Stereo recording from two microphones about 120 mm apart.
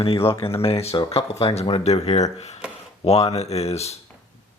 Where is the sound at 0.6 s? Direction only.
55° left (ahead or behind).